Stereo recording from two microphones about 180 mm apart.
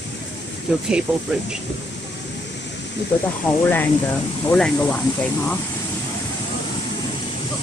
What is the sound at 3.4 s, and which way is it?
Speech, 10° left (ahead or behind).